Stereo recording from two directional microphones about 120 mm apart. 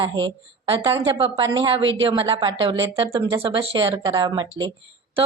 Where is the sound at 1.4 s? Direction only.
40° right (ahead or behind).